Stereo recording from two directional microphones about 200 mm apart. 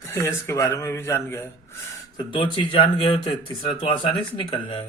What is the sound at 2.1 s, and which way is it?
Speech, 25° left (ahead or behind).